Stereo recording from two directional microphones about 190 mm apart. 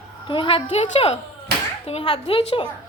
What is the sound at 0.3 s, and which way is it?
A woman's voice, 30° left (ahead or behind).